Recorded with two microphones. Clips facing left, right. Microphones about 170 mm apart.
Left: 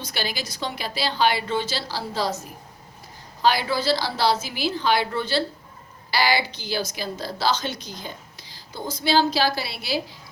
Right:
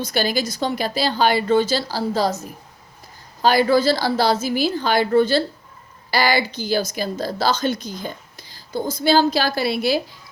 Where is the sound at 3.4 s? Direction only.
45° right (ahead or behind).